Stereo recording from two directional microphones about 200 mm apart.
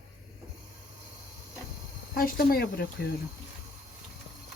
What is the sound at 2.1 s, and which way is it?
Speech, 50° left (ahead or behind).